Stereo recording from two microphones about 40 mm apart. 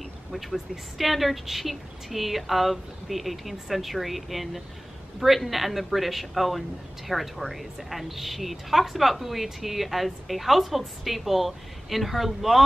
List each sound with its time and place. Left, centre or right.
0.3 s a woman's voice: centre